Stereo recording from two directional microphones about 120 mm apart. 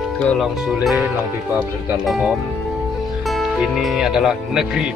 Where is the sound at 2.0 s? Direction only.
Centre (ahead or behind).